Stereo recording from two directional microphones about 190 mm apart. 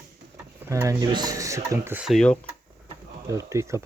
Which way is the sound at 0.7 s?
15° right (ahead or behind).